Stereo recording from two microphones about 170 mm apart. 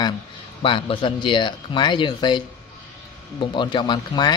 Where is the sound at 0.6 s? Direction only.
30° left (ahead or behind).